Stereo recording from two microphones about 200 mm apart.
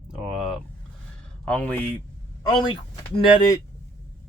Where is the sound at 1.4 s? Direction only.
5° left (ahead or behind).